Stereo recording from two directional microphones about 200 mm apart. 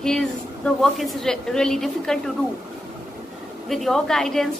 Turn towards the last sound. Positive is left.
turn(degrees=0)  # may be behind; listen again after turning